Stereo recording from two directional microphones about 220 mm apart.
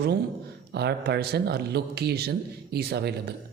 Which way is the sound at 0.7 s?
50° right (ahead or behind).